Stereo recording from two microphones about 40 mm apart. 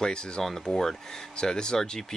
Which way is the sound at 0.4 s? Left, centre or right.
Centre.